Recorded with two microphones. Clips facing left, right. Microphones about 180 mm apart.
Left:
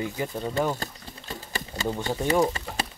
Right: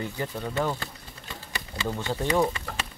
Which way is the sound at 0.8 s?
40° left (ahead or behind).